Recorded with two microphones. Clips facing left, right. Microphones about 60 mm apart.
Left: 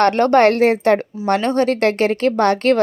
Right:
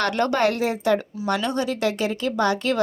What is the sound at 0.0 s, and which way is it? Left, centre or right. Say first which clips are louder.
A woman's voice: left 8 dB; left.